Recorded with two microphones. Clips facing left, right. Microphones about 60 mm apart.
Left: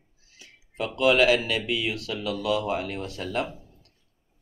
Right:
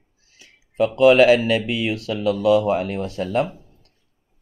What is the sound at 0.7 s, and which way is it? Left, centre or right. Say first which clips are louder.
Speech: right 8 dB; right.